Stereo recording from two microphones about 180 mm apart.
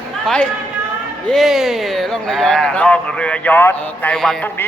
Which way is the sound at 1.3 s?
Centre (ahead or behind).